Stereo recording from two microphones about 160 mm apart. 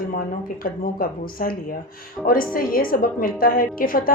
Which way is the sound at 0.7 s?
60° left (ahead or behind).